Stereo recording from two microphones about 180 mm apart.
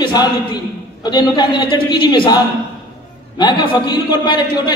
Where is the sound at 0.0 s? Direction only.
25° left (ahead or behind).